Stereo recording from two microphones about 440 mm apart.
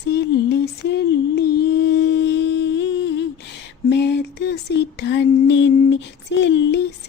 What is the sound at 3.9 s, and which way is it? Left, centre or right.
Music, left.